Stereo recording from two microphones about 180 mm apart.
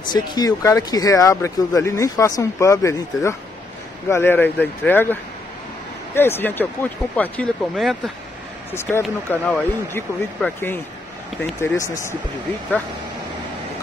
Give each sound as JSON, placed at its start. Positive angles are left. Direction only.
{"t": 0.1, "sound": "speech", "side_deg": 20}
{"t": 6.1, "sound": "speech", "side_deg": 10}
{"t": 8.7, "sound": "speech", "side_deg": 10}